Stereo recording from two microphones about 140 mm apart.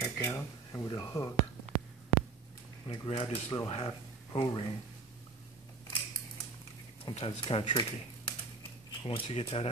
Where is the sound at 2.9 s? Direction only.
45° left (ahead or behind).